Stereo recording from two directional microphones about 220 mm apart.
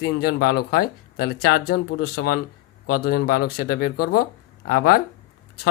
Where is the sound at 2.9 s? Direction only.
40° left (ahead or behind).